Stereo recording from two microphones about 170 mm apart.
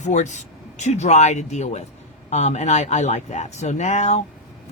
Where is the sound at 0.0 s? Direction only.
45° left (ahead or behind).